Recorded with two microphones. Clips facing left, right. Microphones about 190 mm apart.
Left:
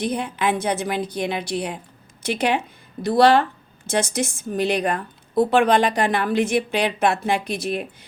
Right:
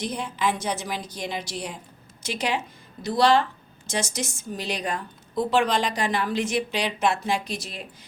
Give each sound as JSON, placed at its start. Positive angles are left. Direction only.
{"t": 0.0, "sound": "a woman's voice", "side_deg": 60}